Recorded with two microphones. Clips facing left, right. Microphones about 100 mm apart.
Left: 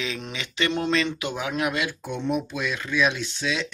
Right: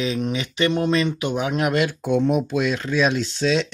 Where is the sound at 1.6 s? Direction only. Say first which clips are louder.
Right 5 dB; 40° right (ahead or behind).